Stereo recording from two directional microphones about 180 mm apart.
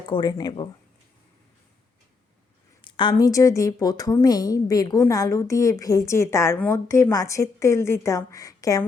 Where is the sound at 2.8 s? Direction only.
25° left (ahead or behind).